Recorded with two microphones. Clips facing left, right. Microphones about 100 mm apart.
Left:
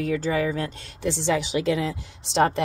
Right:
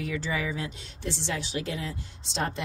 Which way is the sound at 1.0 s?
90° left.